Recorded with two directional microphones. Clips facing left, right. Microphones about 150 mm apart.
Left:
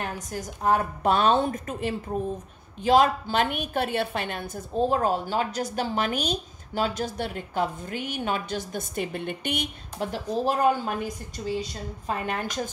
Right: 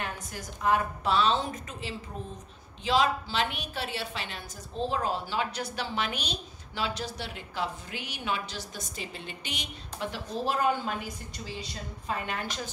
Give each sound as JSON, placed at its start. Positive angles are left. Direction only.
{"t": 0.0, "sound": "a woman's voice", "side_deg": 40}
{"t": 12.1, "sound": "a woman's voice", "side_deg": 45}